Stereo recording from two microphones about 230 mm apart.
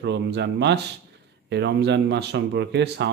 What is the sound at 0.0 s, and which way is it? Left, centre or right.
Speech, right.